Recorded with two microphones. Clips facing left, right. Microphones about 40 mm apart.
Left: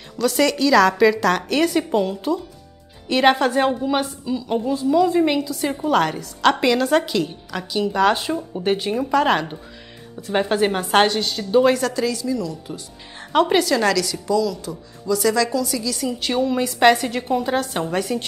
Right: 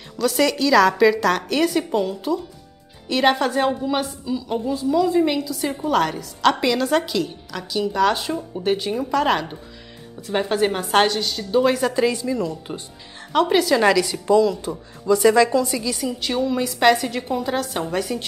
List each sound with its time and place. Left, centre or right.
0.2 s a woman's voice: centre
11.9 s a woman's voice: right
13.2 s a sound: centre
13.7 s a woman's voice: centre
16.0 s a woman's voice: centre